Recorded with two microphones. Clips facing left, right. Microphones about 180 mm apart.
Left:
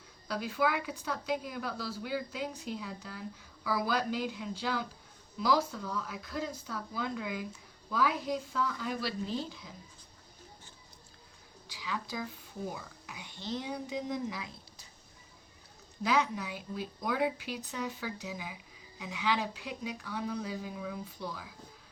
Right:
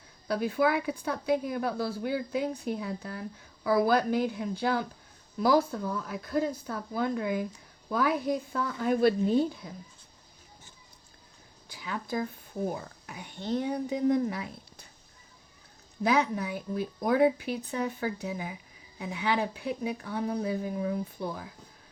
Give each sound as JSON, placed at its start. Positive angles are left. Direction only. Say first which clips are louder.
{"t": 0.3, "sound": "a woman's voice", "louder": "right 5 dB", "side_deg": -55}
{"t": 11.7, "sound": "speech", "louder": "right 5 dB", "side_deg": -55}
{"t": 16.0, "sound": "a woman's voice", "louder": "right 4 dB", "side_deg": -55}